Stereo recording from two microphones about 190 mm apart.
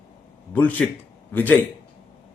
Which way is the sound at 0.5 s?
10° left (ahead or behind).